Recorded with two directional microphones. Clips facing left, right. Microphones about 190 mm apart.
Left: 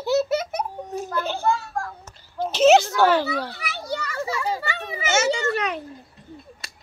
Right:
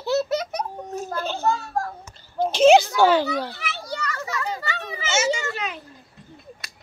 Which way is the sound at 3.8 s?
25° left (ahead or behind).